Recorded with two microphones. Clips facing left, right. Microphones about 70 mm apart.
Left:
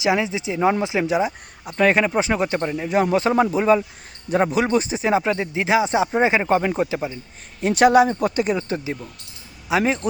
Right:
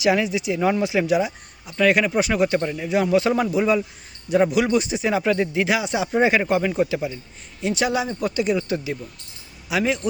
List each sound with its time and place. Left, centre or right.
0.0 s a man's voice: left
2.9 s a man's voice: left
7.6 s speech: left